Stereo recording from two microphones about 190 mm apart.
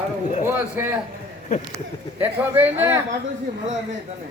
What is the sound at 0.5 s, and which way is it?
Speech, 10° right (ahead or behind).